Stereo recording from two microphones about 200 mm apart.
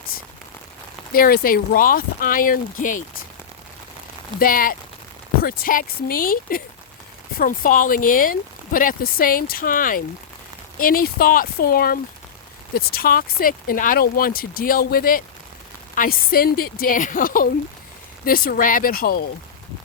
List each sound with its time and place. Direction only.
1.1 s speech: 45° left (ahead or behind)
4.4 s speech: 45° left (ahead or behind)